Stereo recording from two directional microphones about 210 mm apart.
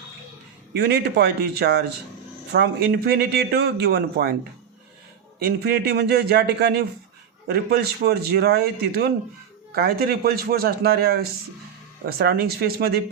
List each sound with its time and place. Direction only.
0.7 s a man's voice: 55° right (ahead or behind)
5.5 s a man's voice: 50° right (ahead or behind)